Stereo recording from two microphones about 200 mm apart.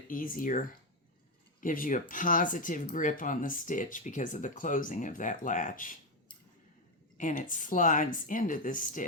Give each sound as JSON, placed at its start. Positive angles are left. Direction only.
{"t": 0.1, "sound": "speech", "side_deg": 45}
{"t": 1.6, "sound": "speech", "side_deg": 45}
{"t": 7.2, "sound": "speech", "side_deg": 40}